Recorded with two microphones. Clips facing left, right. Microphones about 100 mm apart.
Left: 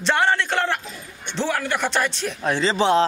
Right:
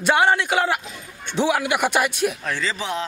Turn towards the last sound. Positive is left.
turn(degrees=30)  # may be behind; listen again after turning